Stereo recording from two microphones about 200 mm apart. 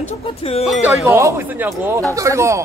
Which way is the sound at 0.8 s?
15° right (ahead or behind).